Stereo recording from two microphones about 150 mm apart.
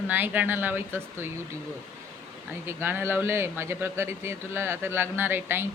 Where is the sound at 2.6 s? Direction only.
15° right (ahead or behind).